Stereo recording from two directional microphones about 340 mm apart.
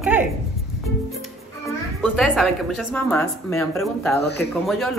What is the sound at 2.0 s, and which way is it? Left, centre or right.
A woman's voice, centre.